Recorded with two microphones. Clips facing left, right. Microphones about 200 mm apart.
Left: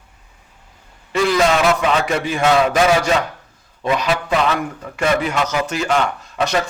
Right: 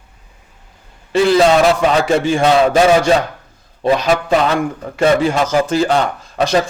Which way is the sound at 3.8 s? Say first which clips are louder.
Right 5 dB; 40° right (ahead or behind).